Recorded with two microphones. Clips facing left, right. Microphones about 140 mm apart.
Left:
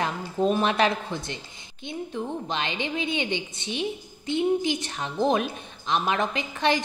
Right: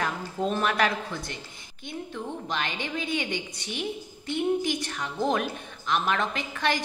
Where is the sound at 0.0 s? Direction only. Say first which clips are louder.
Left 4 dB; 20° left (ahead or behind).